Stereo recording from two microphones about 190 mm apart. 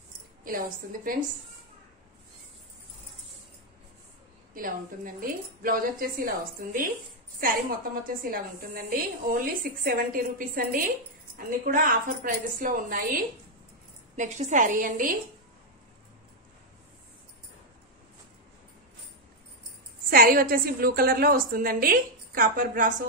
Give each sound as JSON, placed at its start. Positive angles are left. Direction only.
{"t": 0.4, "sound": "a woman's voice", "side_deg": -45}
{"t": 4.6, "sound": "a woman's voice", "side_deg": -45}
{"t": 14.1, "sound": "a woman's voice", "side_deg": -40}
{"t": 20.1, "sound": "a woman's voice", "side_deg": -50}